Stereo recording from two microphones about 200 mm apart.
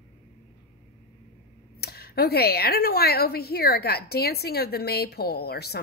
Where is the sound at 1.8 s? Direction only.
50° left (ahead or behind).